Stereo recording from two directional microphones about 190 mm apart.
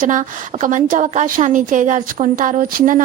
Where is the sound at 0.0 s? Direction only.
40° right (ahead or behind).